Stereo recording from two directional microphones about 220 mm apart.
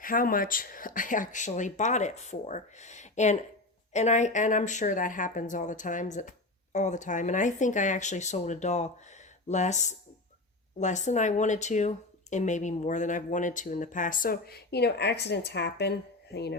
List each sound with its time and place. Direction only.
0.0 s speech: 40° left (ahead or behind)